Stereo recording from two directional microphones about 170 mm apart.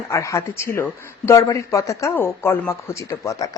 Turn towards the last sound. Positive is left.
turn(degrees=20)  # may be behind; listen again after turning